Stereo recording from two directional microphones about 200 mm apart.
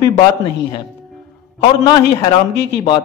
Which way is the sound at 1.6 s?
20° left (ahead or behind).